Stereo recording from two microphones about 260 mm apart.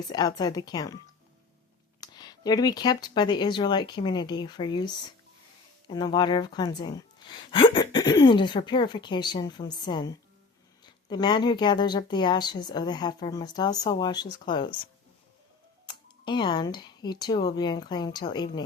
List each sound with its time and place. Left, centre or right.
0.1 s speech: centre
2.0 s speech: centre
5.9 s speech: centre
15.9 s speech: centre